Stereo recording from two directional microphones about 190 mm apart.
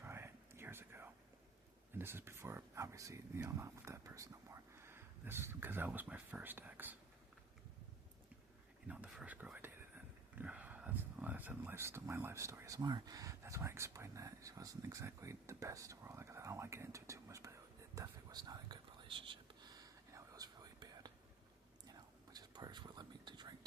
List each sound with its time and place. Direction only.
0.0 s whispering: 15° right (ahead or behind)
1.9 s speech: 10° right (ahead or behind)
8.9 s whispering: 5° right (ahead or behind); by 23.6 s 25° right (ahead or behind)